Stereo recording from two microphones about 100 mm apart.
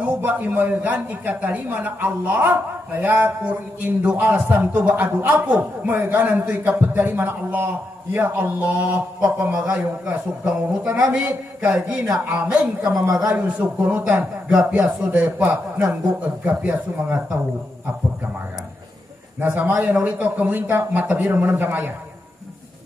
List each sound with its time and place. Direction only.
0.0 s a man's voice: 15° right (ahead or behind)
13.3 s a man's voice: 15° right (ahead or behind)
19.4 s a man's voice: 20° right (ahead or behind)